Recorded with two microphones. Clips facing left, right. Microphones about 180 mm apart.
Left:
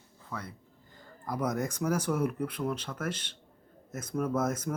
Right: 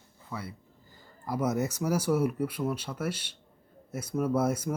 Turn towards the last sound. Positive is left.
turn(degrees=-10)  # may be behind; listen again after turning